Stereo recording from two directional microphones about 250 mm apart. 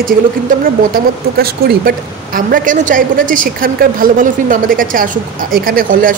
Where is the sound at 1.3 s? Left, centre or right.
Right.